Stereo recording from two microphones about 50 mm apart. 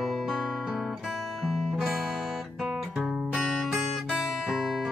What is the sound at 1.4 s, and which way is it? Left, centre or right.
Guitar, centre.